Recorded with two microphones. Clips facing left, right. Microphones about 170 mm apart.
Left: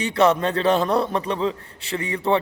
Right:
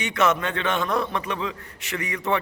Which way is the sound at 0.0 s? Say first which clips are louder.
Left 4 dB; 35° left (ahead or behind).